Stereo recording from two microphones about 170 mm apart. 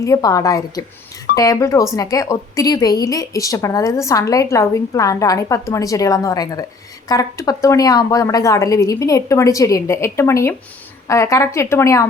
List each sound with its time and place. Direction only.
0.0 s a woman's voice: 20° left (ahead or behind)